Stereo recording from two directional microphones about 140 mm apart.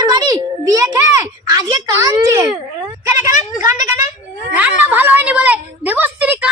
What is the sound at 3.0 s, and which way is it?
Speech, 15° right (ahead or behind).